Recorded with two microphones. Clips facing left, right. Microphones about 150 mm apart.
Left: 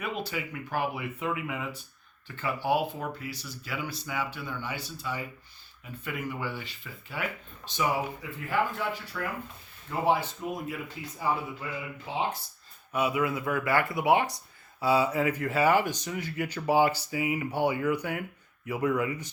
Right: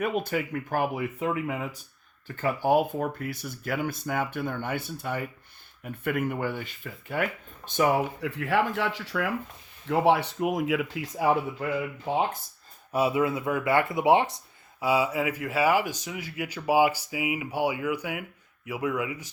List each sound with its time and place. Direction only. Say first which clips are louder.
0.0 s speech: right 6 dB; 50° right (ahead or behind); by 9.3 s 90° right
9.8 s speech: right 4 dB; 80° right
11.6 s speech: right 8 dB; 60° right (ahead or behind)
12.9 s speech: right 3 dB; 30° right (ahead or behind)
14.8 s speech: even; 10° right (ahead or behind)